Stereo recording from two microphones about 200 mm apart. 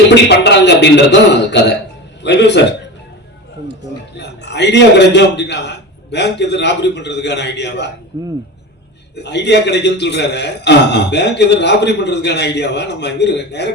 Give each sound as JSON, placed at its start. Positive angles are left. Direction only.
{"t": 0.1, "sound": "a man's voice", "side_deg": 60}
{"t": 4.2, "sound": "a man's voice", "side_deg": 60}
{"t": 8.1, "sound": "speech", "side_deg": -20}
{"t": 9.1, "sound": "a man's voice", "side_deg": 60}